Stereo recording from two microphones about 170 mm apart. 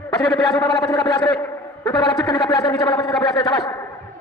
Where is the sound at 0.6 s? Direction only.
25° left (ahead or behind).